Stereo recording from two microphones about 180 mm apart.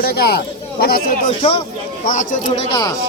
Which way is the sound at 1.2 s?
30° left (ahead or behind).